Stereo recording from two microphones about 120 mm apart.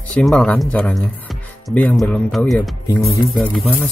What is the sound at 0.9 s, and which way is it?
Music, centre (ahead or behind).